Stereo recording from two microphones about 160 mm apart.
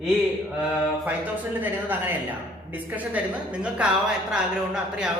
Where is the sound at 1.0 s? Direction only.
10° right (ahead or behind).